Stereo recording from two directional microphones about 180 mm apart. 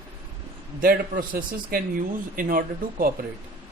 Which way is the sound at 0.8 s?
50° right (ahead or behind).